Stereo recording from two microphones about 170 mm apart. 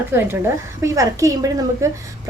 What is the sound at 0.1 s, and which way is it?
A woman's voice, 15° right (ahead or behind).